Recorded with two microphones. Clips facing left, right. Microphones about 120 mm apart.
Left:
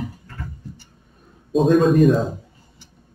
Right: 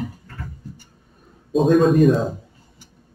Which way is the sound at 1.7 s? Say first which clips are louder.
Even; centre (ahead or behind).